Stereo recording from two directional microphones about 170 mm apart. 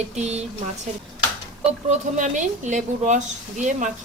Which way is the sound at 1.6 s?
45° right (ahead or behind).